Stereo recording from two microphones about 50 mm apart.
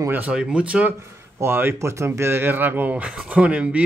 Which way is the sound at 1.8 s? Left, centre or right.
Right.